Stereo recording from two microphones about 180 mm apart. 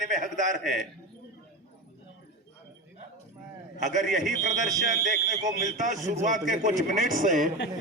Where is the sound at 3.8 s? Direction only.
45° right (ahead or behind).